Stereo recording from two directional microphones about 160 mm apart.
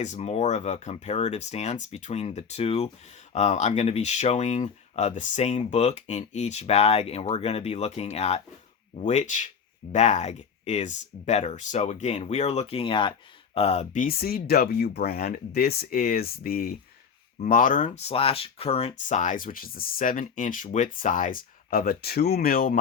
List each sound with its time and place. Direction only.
0.0 s speech: 45° left (ahead or behind)
18.9 s speech: 50° left (ahead or behind)